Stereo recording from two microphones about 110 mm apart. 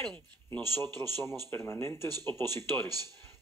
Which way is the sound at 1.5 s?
20° left (ahead or behind).